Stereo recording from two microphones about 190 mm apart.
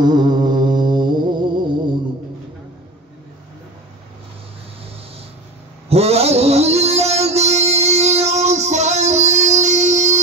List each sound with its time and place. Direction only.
0.0 s music: 20° right (ahead or behind)
5.9 s music: 30° right (ahead or behind)